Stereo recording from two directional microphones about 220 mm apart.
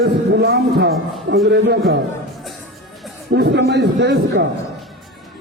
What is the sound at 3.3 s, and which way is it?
A man's voice, 50° right (ahead or behind).